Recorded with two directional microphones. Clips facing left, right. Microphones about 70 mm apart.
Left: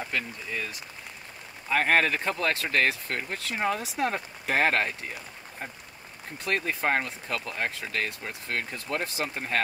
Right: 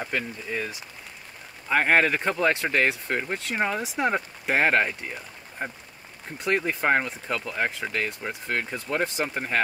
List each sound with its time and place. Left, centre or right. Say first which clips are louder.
0.0 s speech: right 2 dB; right
6.4 s speech: right 3 dB; centre